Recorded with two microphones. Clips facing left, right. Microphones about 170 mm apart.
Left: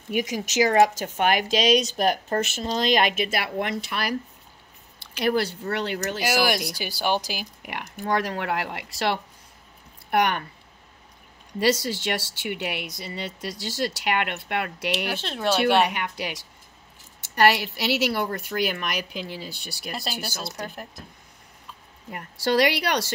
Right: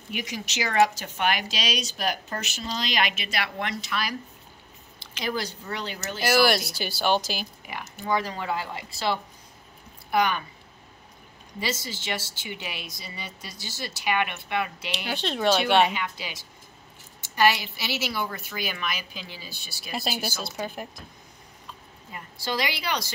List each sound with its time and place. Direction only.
0.1 s speech: 45° left (ahead or behind)
5.2 s speech: 65° left (ahead or behind)
6.2 s speech: 15° left (ahead or behind)
8.0 s speech: 70° left (ahead or behind)
11.6 s speech: 80° left
15.1 s speech: 5° left (ahead or behind)
15.9 s speech: 65° left (ahead or behind)
19.9 s speech: 5° right (ahead or behind)
22.1 s speech: 70° left (ahead or behind)